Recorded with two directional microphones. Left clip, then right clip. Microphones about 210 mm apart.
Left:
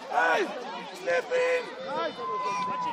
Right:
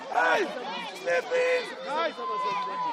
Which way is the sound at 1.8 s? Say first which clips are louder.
Right 2 dB; 35° right (ahead or behind).